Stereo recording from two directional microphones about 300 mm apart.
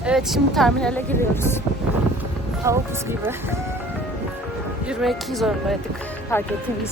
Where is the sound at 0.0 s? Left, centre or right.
Centre.